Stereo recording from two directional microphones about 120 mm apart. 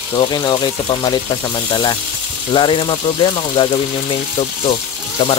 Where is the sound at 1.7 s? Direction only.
35° left (ahead or behind).